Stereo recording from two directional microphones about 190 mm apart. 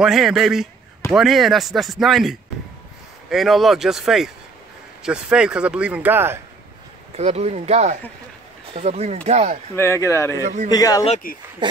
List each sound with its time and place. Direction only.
0.0 s speech: centre (ahead or behind)
7.2 s speech: 35° right (ahead or behind)
9.8 s a man's voice: 15° left (ahead or behind)